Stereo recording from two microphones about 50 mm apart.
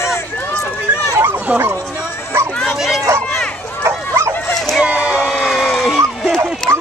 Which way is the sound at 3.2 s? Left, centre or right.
Left.